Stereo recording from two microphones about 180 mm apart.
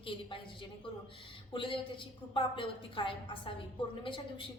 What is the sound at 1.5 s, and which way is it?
A woman's voice, 30° left (ahead or behind).